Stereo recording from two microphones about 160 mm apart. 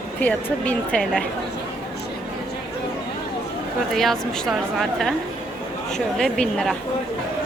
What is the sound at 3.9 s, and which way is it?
A woman's voice, centre (ahead or behind).